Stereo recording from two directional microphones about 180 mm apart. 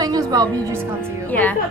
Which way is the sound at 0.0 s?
20° right (ahead or behind).